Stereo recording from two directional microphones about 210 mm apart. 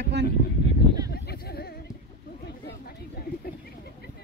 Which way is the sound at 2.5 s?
50° left (ahead or behind).